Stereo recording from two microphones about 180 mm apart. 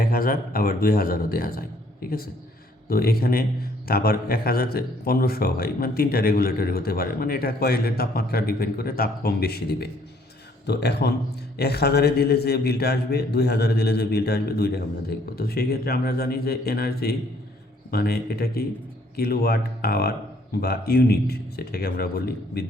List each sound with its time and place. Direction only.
0.0 s speech: 55° left (ahead or behind)